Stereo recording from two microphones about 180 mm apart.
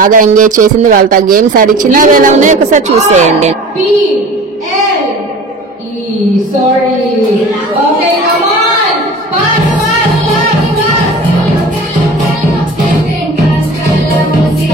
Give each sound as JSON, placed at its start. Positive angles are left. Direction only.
{"t": 0.0, "sound": "speech", "side_deg": -45}